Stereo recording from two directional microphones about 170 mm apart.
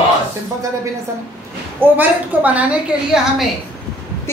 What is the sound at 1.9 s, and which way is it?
A woman's voice, 10° right (ahead or behind).